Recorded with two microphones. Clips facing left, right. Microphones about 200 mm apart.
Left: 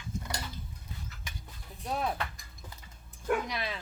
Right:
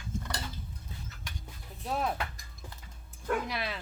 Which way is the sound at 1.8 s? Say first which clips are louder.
Right 1 dB; 5° right (ahead or behind).